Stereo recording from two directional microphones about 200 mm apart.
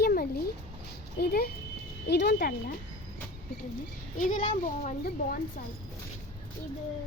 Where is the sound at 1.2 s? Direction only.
50° left (ahead or behind).